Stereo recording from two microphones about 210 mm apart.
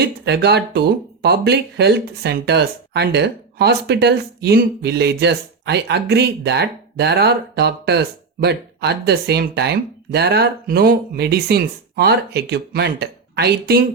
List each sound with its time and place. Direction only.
0.0 s speech: 50° right (ahead or behind)